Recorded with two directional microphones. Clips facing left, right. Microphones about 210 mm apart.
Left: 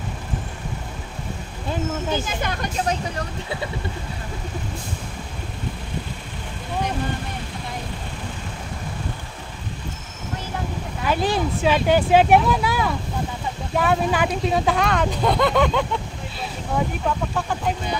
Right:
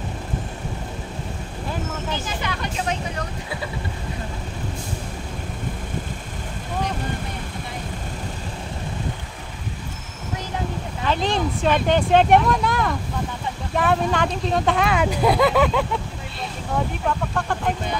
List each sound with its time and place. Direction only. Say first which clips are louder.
2.2 s speech: left 1 dB; 45° left (ahead or behind)
11.1 s speech: left 1 dB; 5° left (ahead or behind)
17.3 s speech: even; 5° left (ahead or behind)